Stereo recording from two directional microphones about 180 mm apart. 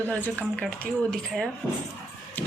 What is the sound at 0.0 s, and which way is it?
Speech, 10° left (ahead or behind).